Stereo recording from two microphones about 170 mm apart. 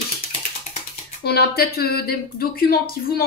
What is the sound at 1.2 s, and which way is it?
Speech, 65° left (ahead or behind).